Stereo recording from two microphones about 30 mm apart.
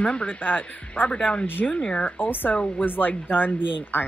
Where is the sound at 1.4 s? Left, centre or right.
Left.